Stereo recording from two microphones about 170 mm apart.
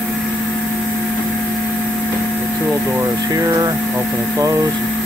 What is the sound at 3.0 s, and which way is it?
Speech, 20° right (ahead or behind).